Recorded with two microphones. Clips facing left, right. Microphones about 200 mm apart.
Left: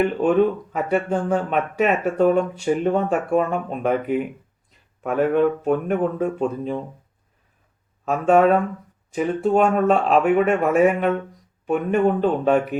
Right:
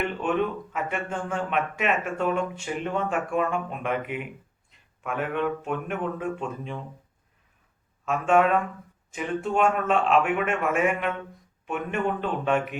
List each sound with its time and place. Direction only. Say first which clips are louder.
0.0 s speech: left 8 dB; 40° left (ahead or behind)
8.0 s speech: left 5 dB; 40° left (ahead or behind)